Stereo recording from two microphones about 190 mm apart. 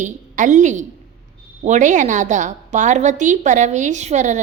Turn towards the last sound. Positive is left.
turn(degrees=-40)  # may be behind; listen again after turning